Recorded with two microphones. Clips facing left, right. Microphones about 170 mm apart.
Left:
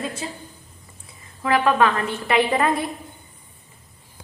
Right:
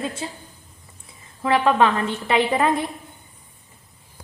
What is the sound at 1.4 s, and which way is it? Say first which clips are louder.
A woman's voice: right 1 dB; 25° right (ahead or behind).